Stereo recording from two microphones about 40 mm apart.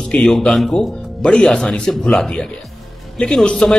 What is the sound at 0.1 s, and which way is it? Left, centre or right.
Speech, left.